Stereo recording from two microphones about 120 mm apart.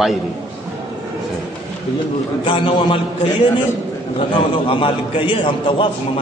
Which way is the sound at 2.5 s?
40° left (ahead or behind).